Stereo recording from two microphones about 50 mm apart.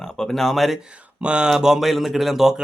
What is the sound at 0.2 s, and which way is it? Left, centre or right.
Speech, centre.